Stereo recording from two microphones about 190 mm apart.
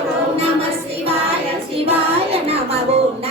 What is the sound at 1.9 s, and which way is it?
Child singing, 30° right (ahead or behind).